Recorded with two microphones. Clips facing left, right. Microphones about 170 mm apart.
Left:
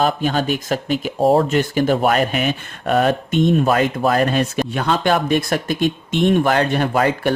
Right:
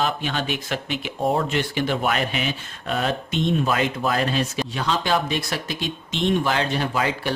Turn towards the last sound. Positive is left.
turn(degrees=55)  # may be behind; listen again after turning